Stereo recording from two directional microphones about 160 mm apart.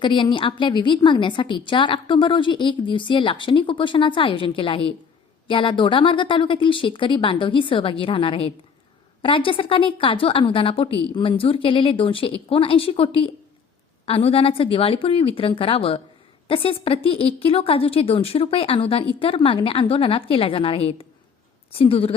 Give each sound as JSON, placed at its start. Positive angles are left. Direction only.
{"t": 0.0, "sound": "a woman's voice", "side_deg": 30}